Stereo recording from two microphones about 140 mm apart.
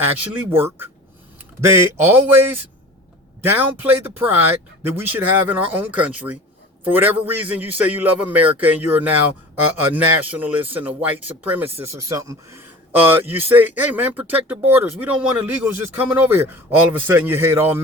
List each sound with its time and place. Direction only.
0.0 s speech: 15° right (ahead or behind)